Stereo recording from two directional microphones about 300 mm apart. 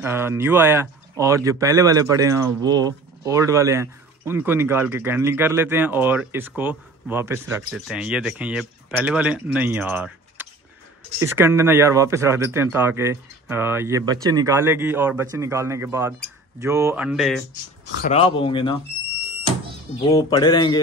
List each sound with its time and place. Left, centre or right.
0.0 s speech: centre
18.0 s speech: centre
20.1 s speech: centre